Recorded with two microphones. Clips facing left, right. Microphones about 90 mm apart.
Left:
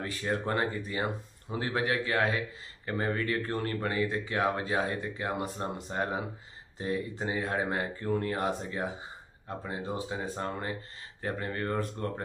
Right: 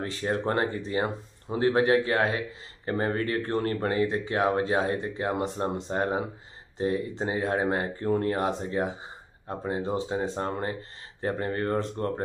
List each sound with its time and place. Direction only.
0.0 s speech: 30° right (ahead or behind)
1.8 s speech: 25° right (ahead or behind)
4.0 s speech: 25° right (ahead or behind)
9.5 s speech: 35° right (ahead or behind)